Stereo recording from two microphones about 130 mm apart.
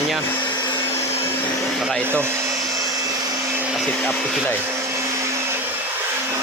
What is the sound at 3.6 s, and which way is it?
Vacuum cleaner, 5° right (ahead or behind).